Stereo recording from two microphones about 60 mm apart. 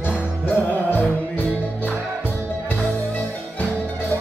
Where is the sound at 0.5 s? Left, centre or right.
Left.